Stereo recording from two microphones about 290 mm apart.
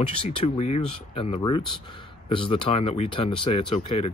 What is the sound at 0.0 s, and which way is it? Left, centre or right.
Speech, centre.